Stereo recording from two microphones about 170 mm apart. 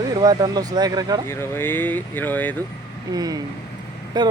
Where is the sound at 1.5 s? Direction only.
10° left (ahead or behind).